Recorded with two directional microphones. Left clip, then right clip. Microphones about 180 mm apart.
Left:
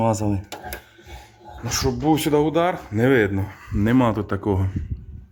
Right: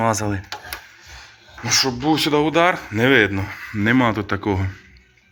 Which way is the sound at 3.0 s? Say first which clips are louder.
Right 3 dB; 20° left (ahead or behind).